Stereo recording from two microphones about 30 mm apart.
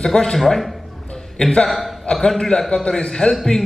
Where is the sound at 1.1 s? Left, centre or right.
Left.